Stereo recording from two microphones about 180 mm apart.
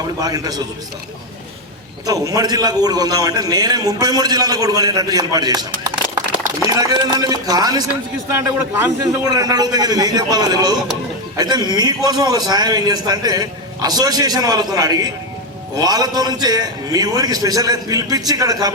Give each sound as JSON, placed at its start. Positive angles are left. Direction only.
{"t": 0.2, "sound": "a man's voice", "side_deg": -20}
{"t": 2.0, "sound": "a man's voice", "side_deg": -20}